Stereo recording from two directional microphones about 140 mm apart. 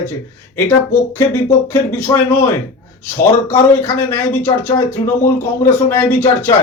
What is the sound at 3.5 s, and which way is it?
Speech, 15° left (ahead or behind).